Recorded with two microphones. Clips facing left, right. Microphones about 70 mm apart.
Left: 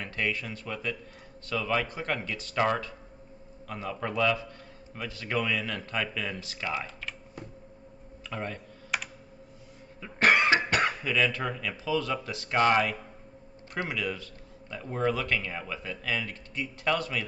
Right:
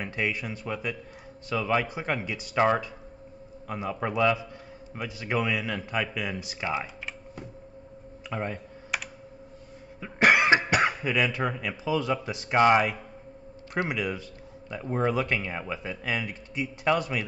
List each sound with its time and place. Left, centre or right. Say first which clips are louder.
0.0 s a man's voice: right 2 dB; centre
8.3 s a man's voice: right 3 dB; centre
8.9 s computer keyboard: even; centre
9.9 s cough: right 2 dB; centre
10.7 s a man's voice: right 3 dB; centre